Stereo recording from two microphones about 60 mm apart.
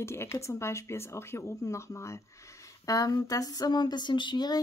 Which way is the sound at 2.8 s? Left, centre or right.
Left.